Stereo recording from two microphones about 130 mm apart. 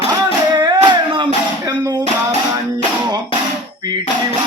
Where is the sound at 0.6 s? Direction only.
35° right (ahead or behind).